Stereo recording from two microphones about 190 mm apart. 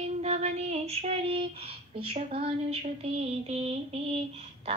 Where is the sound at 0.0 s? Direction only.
35° right (ahead or behind).